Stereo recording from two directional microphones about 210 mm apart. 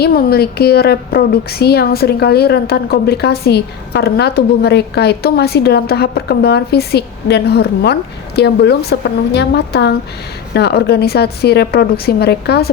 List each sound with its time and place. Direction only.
0.0 s a woman's voice: 50° left (ahead or behind)